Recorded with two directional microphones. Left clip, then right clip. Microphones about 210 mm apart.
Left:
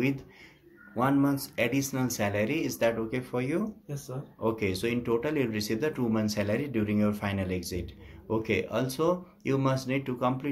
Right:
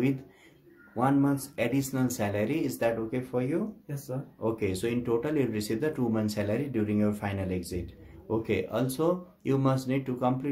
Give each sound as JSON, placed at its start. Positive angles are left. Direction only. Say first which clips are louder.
{"t": 0.9, "sound": "speech", "louder": "even", "side_deg": 0}